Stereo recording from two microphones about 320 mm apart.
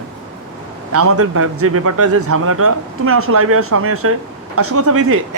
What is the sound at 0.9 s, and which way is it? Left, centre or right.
A woman's voice, right.